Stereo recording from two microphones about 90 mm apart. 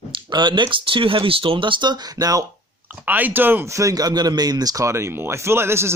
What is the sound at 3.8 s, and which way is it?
Speech, 40° right (ahead or behind).